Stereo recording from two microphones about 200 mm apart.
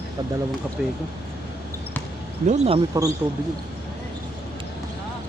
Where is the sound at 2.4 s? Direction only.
35° right (ahead or behind).